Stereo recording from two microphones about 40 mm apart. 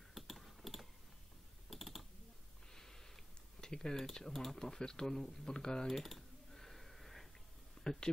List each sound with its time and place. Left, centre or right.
0.1 s typing: centre
1.7 s computer keyboard: centre
2.7 s a sound: centre
3.6 s speech: centre
5.4 s speech: centre
5.9 s computer keyboard: centre
7.8 s speech: centre